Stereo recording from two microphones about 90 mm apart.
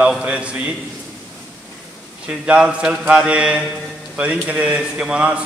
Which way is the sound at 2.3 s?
10° right (ahead or behind).